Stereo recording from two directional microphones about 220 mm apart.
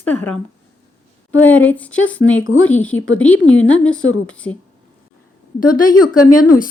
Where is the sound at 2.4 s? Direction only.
65° left (ahead or behind).